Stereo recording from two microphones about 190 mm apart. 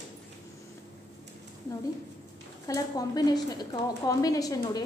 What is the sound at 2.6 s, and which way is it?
A woman's voice, 20° left (ahead or behind).